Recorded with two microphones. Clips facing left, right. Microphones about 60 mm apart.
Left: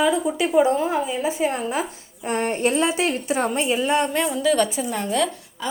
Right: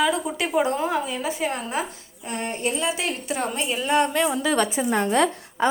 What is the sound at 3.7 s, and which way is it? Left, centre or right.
Speech, centre.